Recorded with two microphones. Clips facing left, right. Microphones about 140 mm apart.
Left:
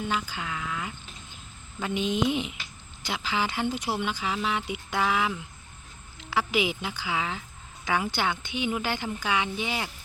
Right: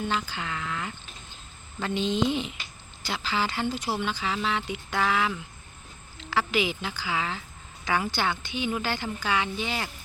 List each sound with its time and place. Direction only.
0.1 s a woman's voice: 5° left (ahead or behind)